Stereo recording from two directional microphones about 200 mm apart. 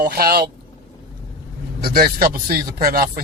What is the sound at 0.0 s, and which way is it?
Speech, 50° right (ahead or behind).